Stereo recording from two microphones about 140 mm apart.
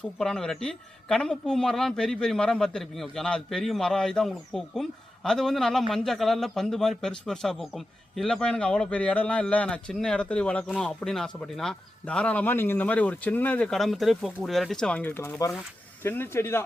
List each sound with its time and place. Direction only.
0.0 s a man's voice: 5° left (ahead or behind)